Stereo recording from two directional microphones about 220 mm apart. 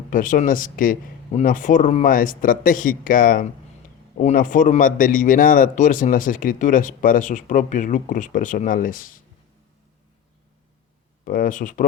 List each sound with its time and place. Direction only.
0.1 s a man's voice: 35° left (ahead or behind)
11.3 s a man's voice: 40° left (ahead or behind)